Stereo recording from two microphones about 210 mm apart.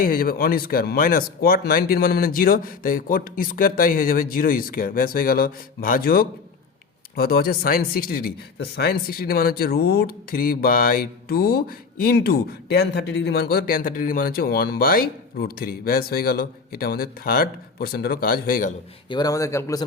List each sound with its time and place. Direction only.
0.0 s speech: 45° left (ahead or behind)
19.0 s speech: 20° left (ahead or behind)